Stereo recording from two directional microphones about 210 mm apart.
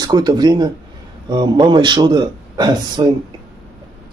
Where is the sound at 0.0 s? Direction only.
20° right (ahead or behind).